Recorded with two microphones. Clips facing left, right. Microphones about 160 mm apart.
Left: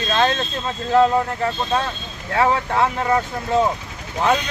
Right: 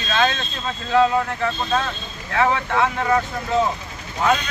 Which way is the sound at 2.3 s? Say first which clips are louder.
Left 1 dB; 35° left (ahead or behind).